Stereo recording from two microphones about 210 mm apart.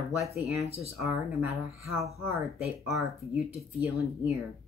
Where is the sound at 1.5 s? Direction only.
Centre (ahead or behind).